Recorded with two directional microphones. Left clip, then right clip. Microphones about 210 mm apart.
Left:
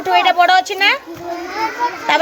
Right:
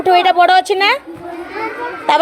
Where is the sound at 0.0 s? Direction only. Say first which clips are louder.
Right 2 dB; 25° right (ahead or behind).